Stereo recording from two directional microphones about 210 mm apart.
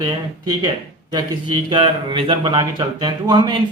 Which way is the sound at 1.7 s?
25° right (ahead or behind).